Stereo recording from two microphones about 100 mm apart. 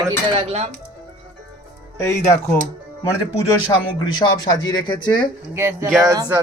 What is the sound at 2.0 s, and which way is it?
Speech, 30° left (ahead or behind).